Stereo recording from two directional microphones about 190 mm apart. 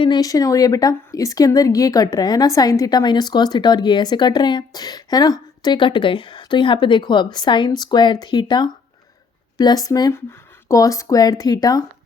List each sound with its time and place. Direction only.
0.0 s a woman's voice: 20° left (ahead or behind)